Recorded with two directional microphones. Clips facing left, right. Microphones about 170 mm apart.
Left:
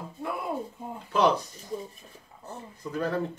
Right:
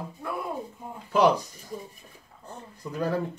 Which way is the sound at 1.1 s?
10° right (ahead or behind).